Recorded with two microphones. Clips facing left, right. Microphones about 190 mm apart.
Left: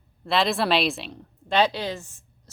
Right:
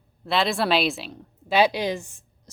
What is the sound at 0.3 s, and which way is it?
A woman's voice, centre (ahead or behind).